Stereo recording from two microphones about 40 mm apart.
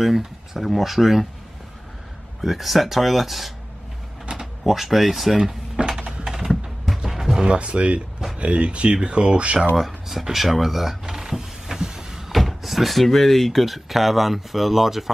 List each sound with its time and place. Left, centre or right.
0.0 s speech: centre
2.4 s speech: centre
4.6 s speech: centre
5.4 s a sound: centre
6.4 s music: centre
7.4 s speech: right
9.8 s speech: centre
10.3 s power windows: centre
12.3 s speech: centre